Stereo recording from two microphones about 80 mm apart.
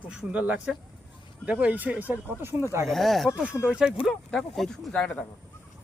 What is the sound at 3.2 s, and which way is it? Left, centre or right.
Speech, centre.